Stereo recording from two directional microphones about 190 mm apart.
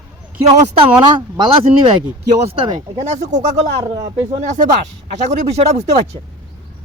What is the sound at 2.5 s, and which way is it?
Speech, 20° right (ahead or behind).